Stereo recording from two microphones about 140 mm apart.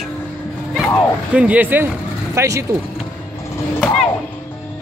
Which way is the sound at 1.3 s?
10° right (ahead or behind).